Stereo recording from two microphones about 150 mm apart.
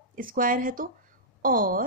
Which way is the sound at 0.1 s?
65° right (ahead or behind).